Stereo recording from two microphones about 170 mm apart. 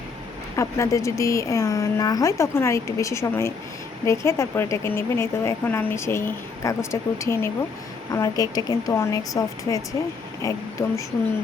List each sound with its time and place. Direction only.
0.5 s a woman's voice: 15° left (ahead or behind)